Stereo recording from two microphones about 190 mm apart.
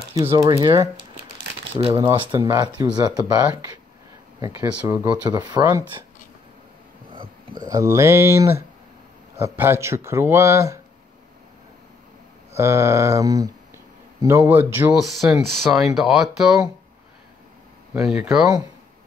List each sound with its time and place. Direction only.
0.3 s speech: 20° right (ahead or behind)
2.3 s speech: 15° right (ahead or behind)
4.4 s speech: 15° right (ahead or behind)
7.1 s speech: 25° right (ahead or behind)
12.5 s speech: 15° right (ahead or behind)
18.0 s speech: 5° right (ahead or behind)